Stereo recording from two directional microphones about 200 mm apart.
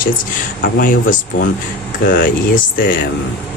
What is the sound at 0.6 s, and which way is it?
Speech, 45° left (ahead or behind).